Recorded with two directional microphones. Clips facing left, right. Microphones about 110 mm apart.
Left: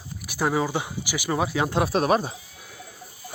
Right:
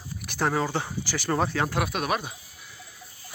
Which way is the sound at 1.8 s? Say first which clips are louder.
Left 6 dB; 35° left (ahead or behind).